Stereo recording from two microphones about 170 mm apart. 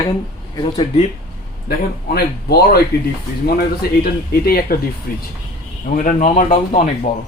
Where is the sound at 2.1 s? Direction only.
65° left (ahead or behind).